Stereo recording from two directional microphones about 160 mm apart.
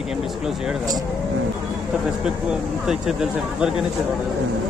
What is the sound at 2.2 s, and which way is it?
Speech, 5° right (ahead or behind).